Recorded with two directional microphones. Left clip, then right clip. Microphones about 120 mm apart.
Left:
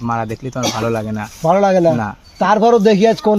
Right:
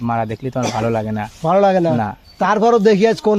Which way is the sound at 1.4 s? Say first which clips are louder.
Left 1 dB; 30° right (ahead or behind).